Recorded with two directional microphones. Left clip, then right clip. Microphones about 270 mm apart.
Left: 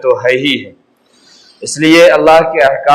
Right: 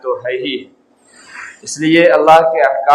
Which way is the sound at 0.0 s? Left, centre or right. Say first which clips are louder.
Left 8 dB; left.